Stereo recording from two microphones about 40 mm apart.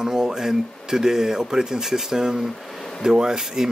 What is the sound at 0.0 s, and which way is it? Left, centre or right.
Speech, centre.